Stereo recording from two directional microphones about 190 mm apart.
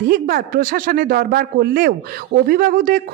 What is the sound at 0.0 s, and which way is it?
A woman's voice, 50° right (ahead or behind).